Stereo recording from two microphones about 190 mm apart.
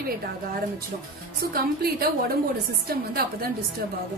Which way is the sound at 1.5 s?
50° right (ahead or behind).